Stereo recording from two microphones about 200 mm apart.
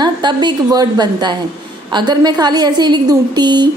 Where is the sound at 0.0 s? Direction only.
20° right (ahead or behind).